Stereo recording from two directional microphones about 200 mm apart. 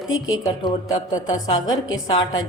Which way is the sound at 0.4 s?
20° left (ahead or behind).